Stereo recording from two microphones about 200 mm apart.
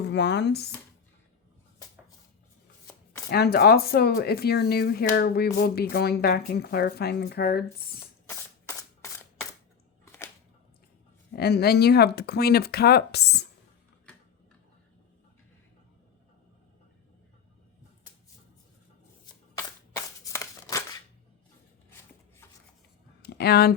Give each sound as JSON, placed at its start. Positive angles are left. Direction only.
{"t": 0.0, "sound": "speech", "side_deg": 60}
{"t": 2.8, "sound": "chopping", "side_deg": 15}
{"t": 3.2, "sound": "speech", "side_deg": 50}
{"t": 11.3, "sound": "speech", "side_deg": 50}
{"t": 20.3, "sound": "a sound", "side_deg": 15}
{"t": 23.2, "sound": "a sound", "side_deg": 55}